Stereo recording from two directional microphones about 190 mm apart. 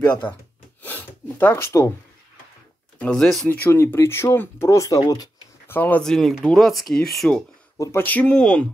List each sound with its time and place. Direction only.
0.0 s speech: 10° left (ahead or behind)
0.8 s a sound: 10° left (ahead or behind)
3.0 s speech: 5° left (ahead or behind)
3.6 s speech: 10° left (ahead or behind)
7.7 s speech: 15° left (ahead or behind)